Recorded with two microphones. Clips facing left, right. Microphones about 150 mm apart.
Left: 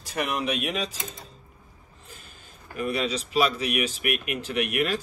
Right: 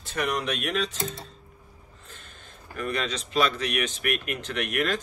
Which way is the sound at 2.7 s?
5° left (ahead or behind).